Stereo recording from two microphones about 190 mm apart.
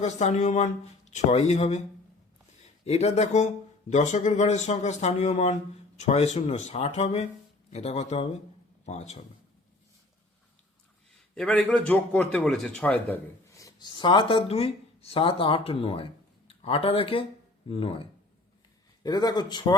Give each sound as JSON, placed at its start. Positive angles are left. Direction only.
{"t": 0.0, "sound": "speech", "side_deg": 35}
{"t": 2.8, "sound": "speech", "side_deg": 35}
{"t": 11.3, "sound": "a man's voice", "side_deg": 5}